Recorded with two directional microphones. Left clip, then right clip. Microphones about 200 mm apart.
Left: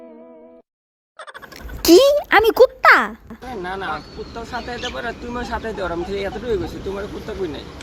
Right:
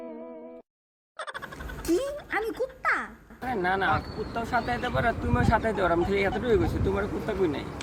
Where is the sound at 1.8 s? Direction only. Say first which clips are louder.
Left 17 dB; 45° left (ahead or behind).